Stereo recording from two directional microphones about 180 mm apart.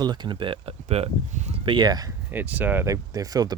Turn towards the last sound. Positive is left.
turn(degrees=-20)  # may be behind; listen again after turning